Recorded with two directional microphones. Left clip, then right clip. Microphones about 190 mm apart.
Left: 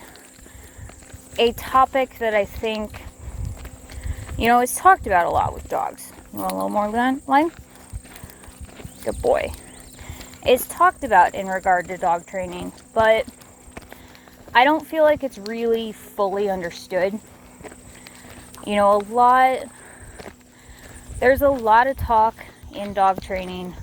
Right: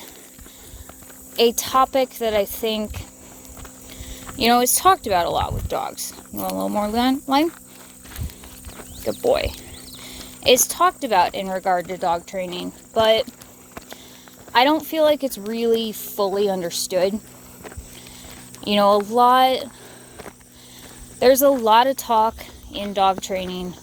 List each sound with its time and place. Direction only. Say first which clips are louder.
1.4 s speech: even; 30° right (ahead or behind)
4.4 s speech: even; 30° right (ahead or behind)
5.0 s speech: left 2 dB; 20° right (ahead or behind)
10.7 s speech: left 2 dB; 30° right (ahead or behind)
14.5 s speech: left 1 dB; 30° right (ahead or behind)
18.6 s speech: right 1 dB; 40° right (ahead or behind)
21.2 s speech: right 2 dB; 40° right (ahead or behind)